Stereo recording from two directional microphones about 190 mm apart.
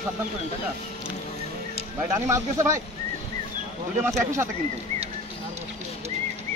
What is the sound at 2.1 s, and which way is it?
Speech, 15° right (ahead or behind).